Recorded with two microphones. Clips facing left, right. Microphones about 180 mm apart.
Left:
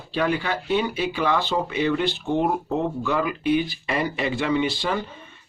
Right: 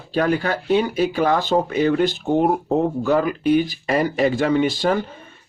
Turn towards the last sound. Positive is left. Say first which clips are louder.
# right 5 dB
turn(degrees=-45)  # may be behind; listen again after turning